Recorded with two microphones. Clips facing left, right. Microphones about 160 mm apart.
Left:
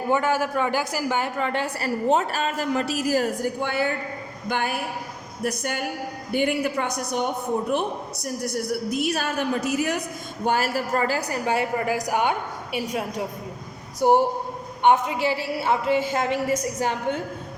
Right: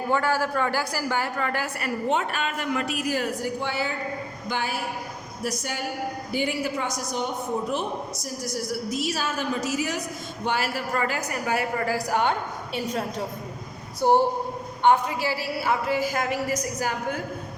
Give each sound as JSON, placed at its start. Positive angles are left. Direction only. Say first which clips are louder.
{"t": 0.1, "sound": "a woman's voice", "louder": "left 2 dB", "side_deg": 20}
{"t": 10.4, "sound": "a woman's voice", "louder": "left 4 dB", "side_deg": 45}